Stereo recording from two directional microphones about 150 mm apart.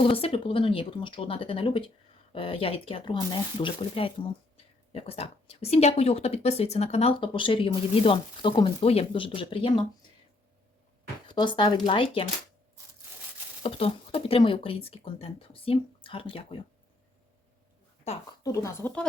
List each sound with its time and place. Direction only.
0.0 s speech: 40° left (ahead or behind)
11.3 s speech: 30° left (ahead or behind)
13.6 s speech: 40° left (ahead or behind)
18.4 s speech: 20° left (ahead or behind)